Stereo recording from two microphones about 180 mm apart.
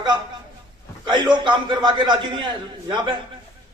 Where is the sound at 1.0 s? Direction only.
25° right (ahead or behind).